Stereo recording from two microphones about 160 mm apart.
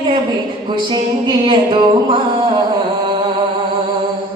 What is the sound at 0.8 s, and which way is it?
Music, 30° right (ahead or behind).